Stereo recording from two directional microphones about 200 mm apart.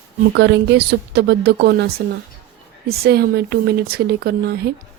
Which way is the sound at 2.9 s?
50° right (ahead or behind).